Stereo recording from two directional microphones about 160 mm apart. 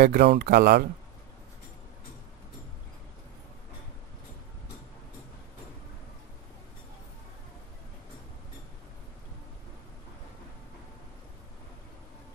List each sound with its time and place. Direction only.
0.0 s speech: 70° right (ahead or behind)